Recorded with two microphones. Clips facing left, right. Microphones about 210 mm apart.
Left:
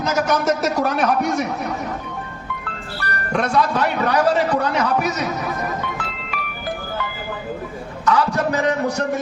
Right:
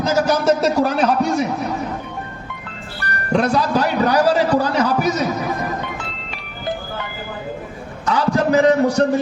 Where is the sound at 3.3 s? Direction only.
30° right (ahead or behind).